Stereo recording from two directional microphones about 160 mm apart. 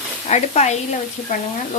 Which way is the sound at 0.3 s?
45° left (ahead or behind).